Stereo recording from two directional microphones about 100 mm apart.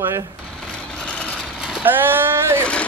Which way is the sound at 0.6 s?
10° left (ahead or behind).